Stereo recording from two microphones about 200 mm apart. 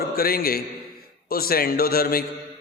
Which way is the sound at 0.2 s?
50° left (ahead or behind).